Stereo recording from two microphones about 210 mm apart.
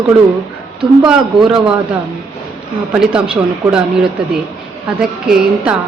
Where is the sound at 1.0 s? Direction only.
5° right (ahead or behind).